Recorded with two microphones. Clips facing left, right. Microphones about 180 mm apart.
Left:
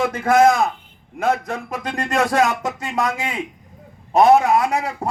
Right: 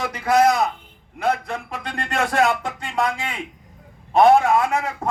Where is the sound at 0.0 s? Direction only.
50° left (ahead or behind).